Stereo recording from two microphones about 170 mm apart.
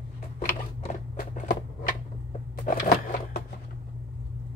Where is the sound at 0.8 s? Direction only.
50° left (ahead or behind).